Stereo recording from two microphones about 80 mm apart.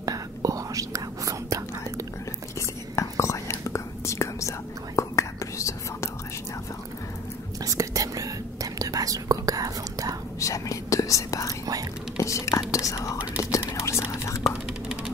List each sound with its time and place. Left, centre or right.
0.0 s whispering: right
2.6 s whispering: left
7.6 s whispering: right
10.4 s whispering: left